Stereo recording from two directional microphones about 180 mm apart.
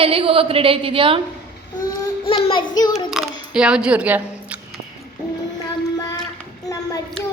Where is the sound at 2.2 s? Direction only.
30° left (ahead or behind).